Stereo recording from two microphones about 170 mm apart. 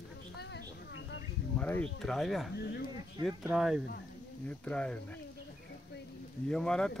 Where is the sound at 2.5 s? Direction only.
75° left (ahead or behind).